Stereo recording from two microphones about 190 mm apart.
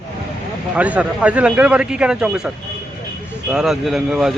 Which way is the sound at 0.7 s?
5° right (ahead or behind).